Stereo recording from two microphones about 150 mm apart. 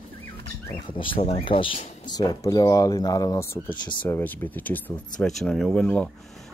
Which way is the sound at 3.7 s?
30° left (ahead or behind).